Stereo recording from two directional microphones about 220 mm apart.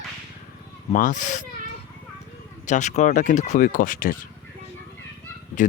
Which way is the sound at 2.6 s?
35° left (ahead or behind).